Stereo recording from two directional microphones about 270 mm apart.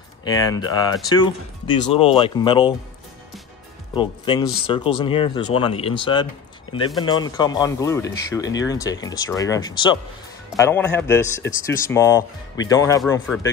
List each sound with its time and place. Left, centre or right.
0.2 s speech: centre
3.9 s speech: centre